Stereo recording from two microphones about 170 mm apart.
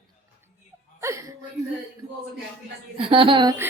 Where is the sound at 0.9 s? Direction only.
15° right (ahead or behind).